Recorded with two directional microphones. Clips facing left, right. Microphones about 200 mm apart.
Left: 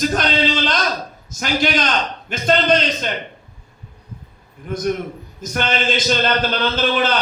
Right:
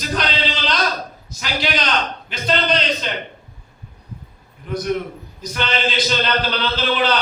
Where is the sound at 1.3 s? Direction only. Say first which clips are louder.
Left 4 dB; 50° left (ahead or behind).